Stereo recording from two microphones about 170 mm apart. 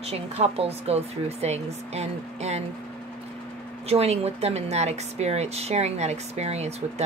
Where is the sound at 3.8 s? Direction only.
35° right (ahead or behind).